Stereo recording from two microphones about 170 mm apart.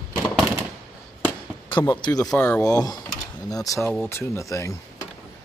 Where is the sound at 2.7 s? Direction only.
25° left (ahead or behind).